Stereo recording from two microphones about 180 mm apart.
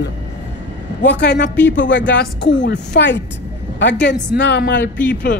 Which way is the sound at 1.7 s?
90° left.